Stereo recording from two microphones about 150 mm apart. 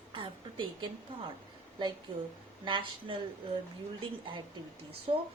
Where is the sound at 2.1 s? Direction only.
35° right (ahead or behind).